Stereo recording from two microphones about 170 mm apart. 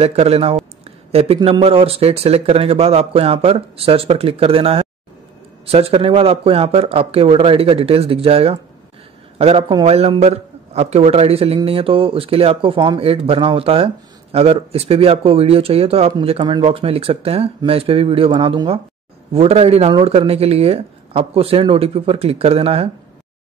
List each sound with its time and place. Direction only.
0.0 s a man's voice: 35° right (ahead or behind)